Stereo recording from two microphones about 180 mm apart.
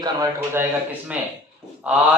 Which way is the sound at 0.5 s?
10° right (ahead or behind).